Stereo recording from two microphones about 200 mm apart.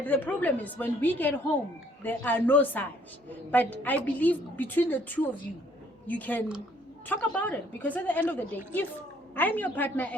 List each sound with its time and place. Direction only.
0.0 s a woman's voice: 10° left (ahead or behind)